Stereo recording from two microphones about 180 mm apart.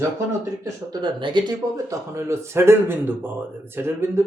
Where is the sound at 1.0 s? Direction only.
25° right (ahead or behind).